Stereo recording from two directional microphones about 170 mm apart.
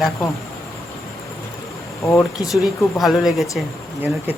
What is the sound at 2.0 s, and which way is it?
Speech, 15° left (ahead or behind).